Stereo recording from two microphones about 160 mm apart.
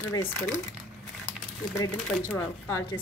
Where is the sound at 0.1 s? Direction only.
15° left (ahead or behind).